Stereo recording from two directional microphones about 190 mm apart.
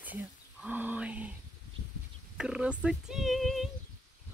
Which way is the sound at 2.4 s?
5° right (ahead or behind).